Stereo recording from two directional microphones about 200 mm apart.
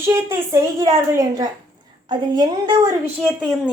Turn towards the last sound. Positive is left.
turn(degrees=0)  # may be behind; listen again after turning